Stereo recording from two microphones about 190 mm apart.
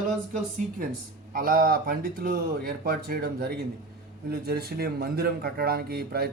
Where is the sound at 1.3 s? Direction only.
50° right (ahead or behind).